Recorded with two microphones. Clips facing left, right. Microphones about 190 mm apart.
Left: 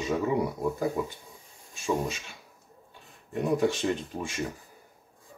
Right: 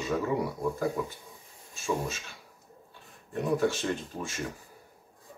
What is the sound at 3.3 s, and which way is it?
Speech, 15° left (ahead or behind).